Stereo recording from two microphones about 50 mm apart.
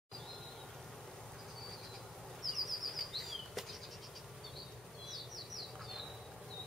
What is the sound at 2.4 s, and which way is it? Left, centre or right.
Bird flight, centre.